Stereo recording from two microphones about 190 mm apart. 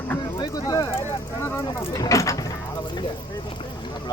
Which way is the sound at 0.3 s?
20° left (ahead or behind).